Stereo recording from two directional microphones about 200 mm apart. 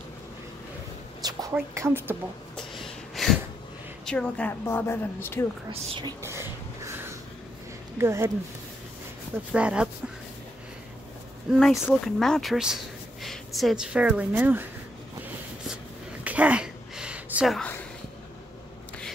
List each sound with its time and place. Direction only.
1.5 s a woman's voice: 10° right (ahead or behind)
2.5 s snort: centre (ahead or behind)
4.0 s a woman's voice: 5° left (ahead or behind)
5.7 s whispering: 25° right (ahead or behind)
8.0 s a woman's voice: 15° right (ahead or behind)
9.5 s speech: 5° right (ahead or behind)
11.5 s speech: centre (ahead or behind)
16.3 s a sound: 5° right (ahead or behind)